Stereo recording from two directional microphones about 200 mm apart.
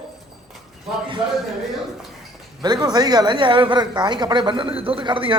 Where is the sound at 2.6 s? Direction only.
20° right (ahead or behind).